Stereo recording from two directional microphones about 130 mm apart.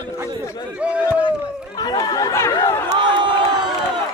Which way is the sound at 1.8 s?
30° left (ahead or behind).